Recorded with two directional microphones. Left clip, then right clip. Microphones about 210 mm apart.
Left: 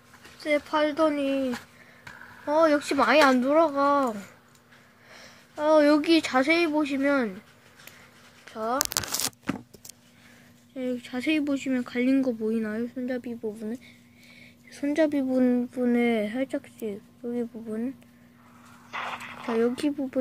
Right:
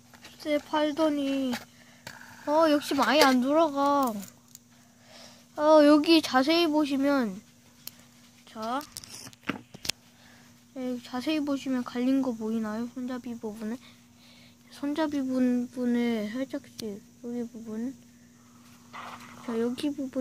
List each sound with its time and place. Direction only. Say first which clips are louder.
0.4 s speech: left 3 dB; 15° right (ahead or behind)
5.1 s speech: right 1 dB; 20° right (ahead or behind)
10.8 s speech: left 3 dB; 10° right (ahead or behind)
13.2 s speech: left 3 dB; 35° right (ahead or behind)
14.9 s speech: left 5 dB; 15° right (ahead or behind)
18.9 s dog: left 8 dB; 30° left (ahead or behind)
19.6 s speech: left 4 dB; 15° right (ahead or behind)